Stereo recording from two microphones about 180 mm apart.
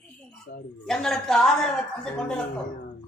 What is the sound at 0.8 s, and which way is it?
Speech, 5° left (ahead or behind).